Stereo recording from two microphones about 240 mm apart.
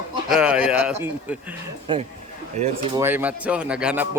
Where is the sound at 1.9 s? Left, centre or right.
Right.